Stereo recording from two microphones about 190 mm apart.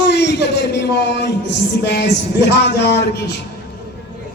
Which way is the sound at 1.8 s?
60° left (ahead or behind).